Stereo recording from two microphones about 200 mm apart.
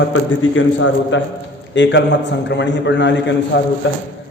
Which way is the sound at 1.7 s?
65° left (ahead or behind).